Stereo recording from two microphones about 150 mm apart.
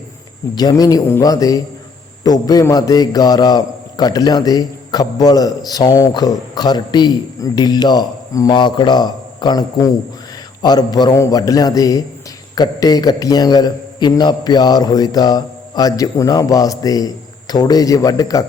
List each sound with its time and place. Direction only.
0.5 s a man's voice: 25° left (ahead or behind)